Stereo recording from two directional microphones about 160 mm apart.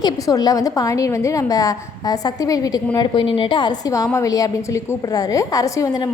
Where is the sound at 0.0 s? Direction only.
25° left (ahead or behind).